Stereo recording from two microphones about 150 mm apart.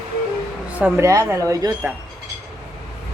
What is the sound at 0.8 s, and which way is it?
Speech, 10° right (ahead or behind).